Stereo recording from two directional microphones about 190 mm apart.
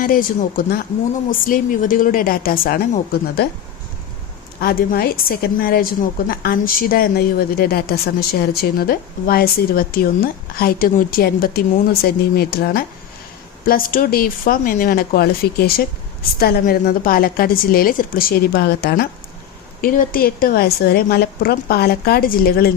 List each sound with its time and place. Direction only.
0.0 s a woman's voice: 45° left (ahead or behind)
4.6 s a woman's voice: 55° left (ahead or behind)